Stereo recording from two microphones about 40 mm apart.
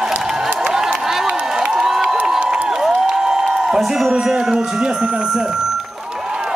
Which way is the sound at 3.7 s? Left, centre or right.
Centre.